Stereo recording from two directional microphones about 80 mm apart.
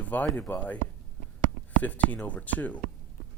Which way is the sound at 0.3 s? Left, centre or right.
Left.